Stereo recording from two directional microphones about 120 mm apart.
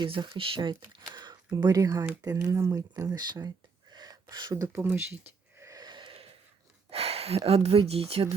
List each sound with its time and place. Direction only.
0.0 s speech: 45° right (ahead or behind)
3.9 s gasp: 35° right (ahead or behind)
6.9 s speech: 55° right (ahead or behind)